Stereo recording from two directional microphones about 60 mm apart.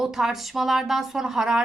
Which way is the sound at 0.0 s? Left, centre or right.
Centre.